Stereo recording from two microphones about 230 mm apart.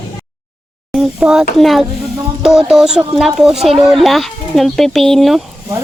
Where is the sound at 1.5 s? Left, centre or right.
Centre.